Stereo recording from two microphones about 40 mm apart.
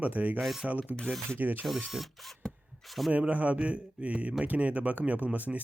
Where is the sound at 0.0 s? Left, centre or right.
Right.